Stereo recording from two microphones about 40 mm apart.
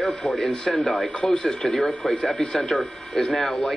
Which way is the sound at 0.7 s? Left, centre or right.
Centre.